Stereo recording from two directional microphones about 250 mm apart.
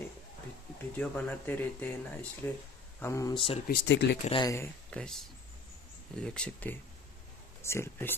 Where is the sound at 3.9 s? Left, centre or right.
Left.